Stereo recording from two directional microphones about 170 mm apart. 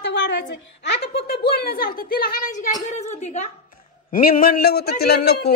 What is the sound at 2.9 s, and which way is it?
Speech, 40° left (ahead or behind).